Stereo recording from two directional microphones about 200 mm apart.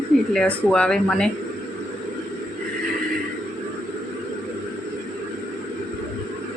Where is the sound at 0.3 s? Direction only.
5° left (ahead or behind).